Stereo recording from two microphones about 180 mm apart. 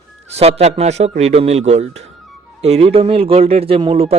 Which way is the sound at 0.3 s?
35° right (ahead or behind).